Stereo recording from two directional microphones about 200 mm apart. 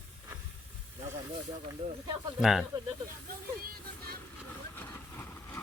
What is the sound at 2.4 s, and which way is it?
Speech, centre (ahead or behind).